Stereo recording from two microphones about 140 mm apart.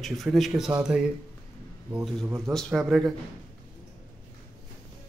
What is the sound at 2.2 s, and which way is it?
Speech, 20° right (ahead or behind).